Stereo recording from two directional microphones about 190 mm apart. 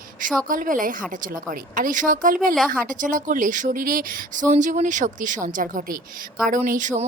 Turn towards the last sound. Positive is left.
turn(degrees=-40)  # may be behind; listen again after turning